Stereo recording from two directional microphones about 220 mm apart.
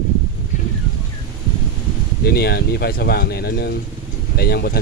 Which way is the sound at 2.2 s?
45° left (ahead or behind).